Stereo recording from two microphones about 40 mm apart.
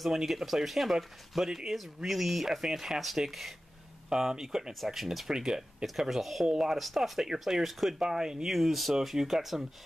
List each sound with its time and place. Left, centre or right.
0.0 s speech: centre
5.3 s speech: centre